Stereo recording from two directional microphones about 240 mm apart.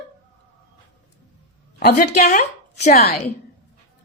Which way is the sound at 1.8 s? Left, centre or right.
Left.